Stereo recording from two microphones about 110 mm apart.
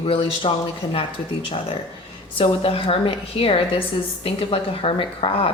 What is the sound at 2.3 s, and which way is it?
A woman's voice, 55° left (ahead or behind).